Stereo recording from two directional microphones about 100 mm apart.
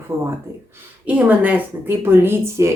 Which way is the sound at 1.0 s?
15° right (ahead or behind).